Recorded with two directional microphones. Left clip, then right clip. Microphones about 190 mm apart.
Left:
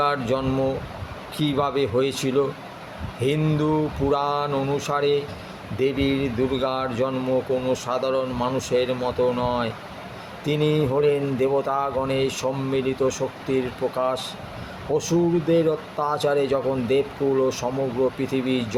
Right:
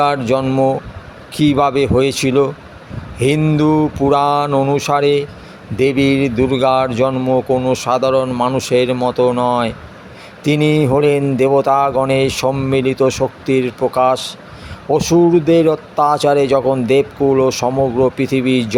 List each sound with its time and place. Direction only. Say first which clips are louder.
0.0 s speech: right 8 dB; 40° right (ahead or behind)